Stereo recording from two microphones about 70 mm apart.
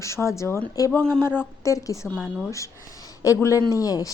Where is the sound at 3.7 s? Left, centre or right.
Left.